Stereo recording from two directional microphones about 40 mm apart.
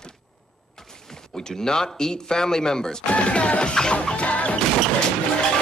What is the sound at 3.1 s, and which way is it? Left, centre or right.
Music, left.